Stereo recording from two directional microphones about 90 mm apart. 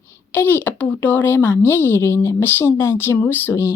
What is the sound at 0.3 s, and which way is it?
Speech, 20° left (ahead or behind).